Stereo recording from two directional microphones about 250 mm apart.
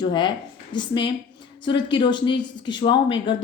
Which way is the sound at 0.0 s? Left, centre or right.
Centre.